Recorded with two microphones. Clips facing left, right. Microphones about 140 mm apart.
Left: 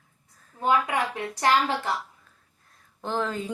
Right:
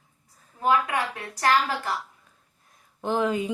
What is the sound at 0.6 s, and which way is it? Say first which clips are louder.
A woman's voice: even; 25° left (ahead or behind).